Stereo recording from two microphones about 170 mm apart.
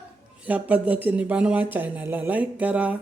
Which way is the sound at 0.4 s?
10° right (ahead or behind).